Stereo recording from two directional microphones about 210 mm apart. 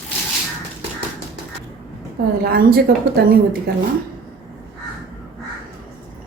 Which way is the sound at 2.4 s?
45° right (ahead or behind).